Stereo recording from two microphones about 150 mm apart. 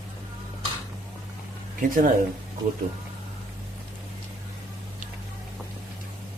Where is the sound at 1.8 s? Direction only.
65° right (ahead or behind).